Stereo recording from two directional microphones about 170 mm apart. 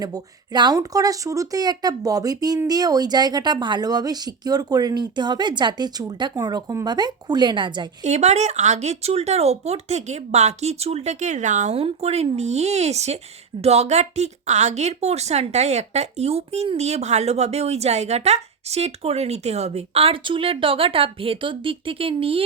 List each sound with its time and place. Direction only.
0.0 s speech: 25° right (ahead or behind)
8.0 s a woman's voice: 40° right (ahead or behind)